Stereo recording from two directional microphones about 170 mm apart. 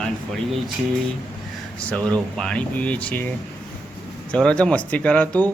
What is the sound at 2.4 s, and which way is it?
Speech, 5° left (ahead or behind).